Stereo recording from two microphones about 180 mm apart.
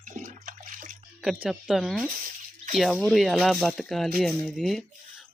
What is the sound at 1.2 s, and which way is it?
Speech, 5° right (ahead or behind).